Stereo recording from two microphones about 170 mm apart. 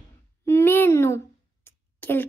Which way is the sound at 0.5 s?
15° left (ahead or behind).